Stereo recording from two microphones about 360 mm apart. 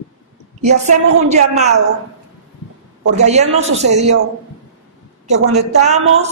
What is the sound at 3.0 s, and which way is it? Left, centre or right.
A woman's voice, centre.